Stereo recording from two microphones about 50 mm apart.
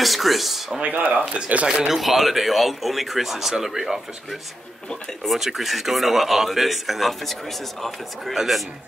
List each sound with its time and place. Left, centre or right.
0.0 s a sound: centre
1.3 s speech: right
1.7 s speech: centre
2.0 s a man's voice: centre